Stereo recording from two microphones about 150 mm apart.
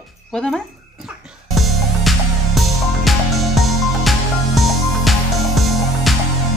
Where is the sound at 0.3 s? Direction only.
5° left (ahead or behind).